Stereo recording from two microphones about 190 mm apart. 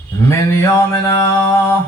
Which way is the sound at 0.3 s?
15° left (ahead or behind).